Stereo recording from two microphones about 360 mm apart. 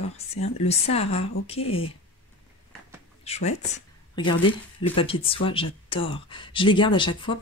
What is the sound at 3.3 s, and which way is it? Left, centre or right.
Speech, centre.